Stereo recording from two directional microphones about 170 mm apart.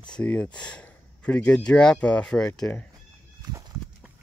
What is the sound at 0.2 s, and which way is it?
Speech, 10° left (ahead or behind).